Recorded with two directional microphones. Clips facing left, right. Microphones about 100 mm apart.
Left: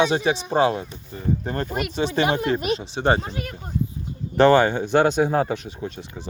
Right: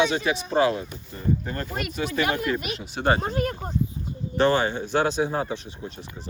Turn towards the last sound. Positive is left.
turn(degrees=90)